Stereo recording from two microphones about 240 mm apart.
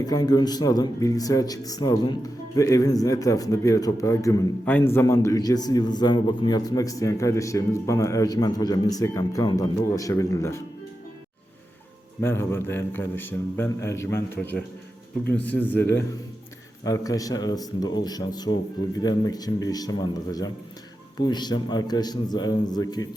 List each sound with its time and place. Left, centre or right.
0.0 s a man's voice: centre
12.2 s a man's voice: centre